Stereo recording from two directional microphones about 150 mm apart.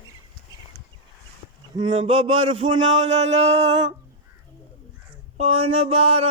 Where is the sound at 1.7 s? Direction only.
35° right (ahead or behind).